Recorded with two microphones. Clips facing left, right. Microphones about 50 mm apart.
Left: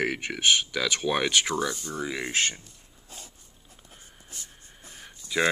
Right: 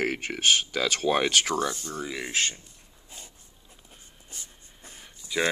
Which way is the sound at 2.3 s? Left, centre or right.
Left.